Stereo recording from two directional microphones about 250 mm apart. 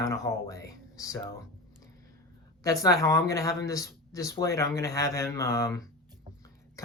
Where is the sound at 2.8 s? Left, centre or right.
Centre.